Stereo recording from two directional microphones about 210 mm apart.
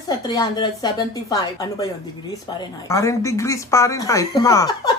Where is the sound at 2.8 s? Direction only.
15° left (ahead or behind).